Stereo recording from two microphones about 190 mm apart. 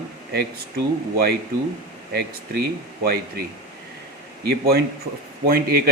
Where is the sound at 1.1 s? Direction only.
55° right (ahead or behind).